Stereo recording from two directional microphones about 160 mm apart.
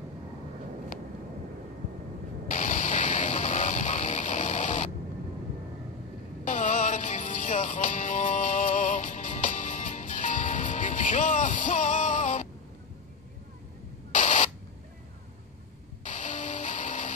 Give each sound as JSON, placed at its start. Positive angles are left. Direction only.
{"t": 2.4, "sound": "music", "side_deg": 55}
{"t": 6.4, "sound": "music", "side_deg": 50}
{"t": 14.1, "sound": "a sound", "side_deg": 50}
{"t": 16.0, "sound": "music", "side_deg": 50}